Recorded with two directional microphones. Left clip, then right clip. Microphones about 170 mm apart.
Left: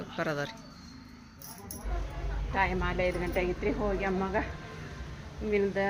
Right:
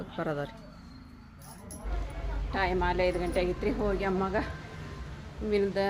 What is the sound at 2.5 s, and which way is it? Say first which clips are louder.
Speech: right 1 dB; 20° right (ahead or behind).